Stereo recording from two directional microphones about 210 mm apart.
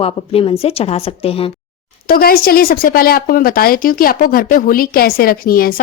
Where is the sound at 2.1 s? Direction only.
45° left (ahead or behind).